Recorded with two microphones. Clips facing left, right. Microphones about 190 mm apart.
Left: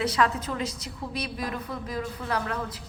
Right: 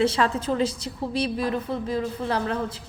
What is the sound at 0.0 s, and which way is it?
A woman's voice, 30° right (ahead or behind).